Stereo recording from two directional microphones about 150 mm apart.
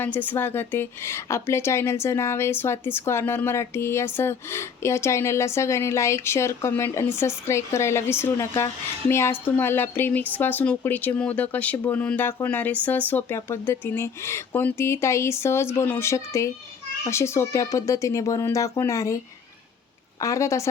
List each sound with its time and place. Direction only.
0.0 s a woman's voice: 10° left (ahead or behind)
20.2 s speech: 20° left (ahead or behind)